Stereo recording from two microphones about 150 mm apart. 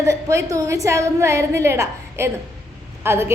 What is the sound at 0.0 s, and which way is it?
A woman's voice, 20° right (ahead or behind).